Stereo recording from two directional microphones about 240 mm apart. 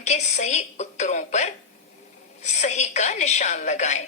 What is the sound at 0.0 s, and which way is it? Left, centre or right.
A woman's voice, left.